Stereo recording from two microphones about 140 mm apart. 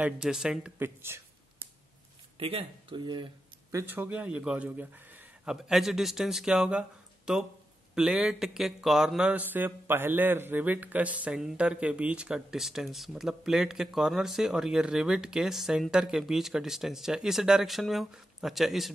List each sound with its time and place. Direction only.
0.0 s a man's voice: 5° right (ahead or behind)
2.3 s speech: 40° right (ahead or behind)
3.7 s a man's voice: 15° right (ahead or behind)